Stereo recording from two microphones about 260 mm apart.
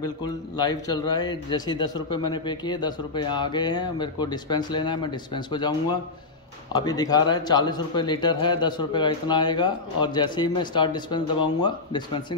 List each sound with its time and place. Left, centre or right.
0.0 s speech: centre